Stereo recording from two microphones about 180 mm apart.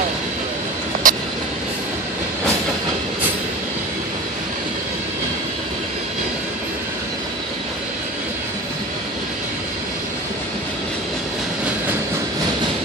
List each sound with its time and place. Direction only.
1.0 s vehicle: 50° right (ahead or behind)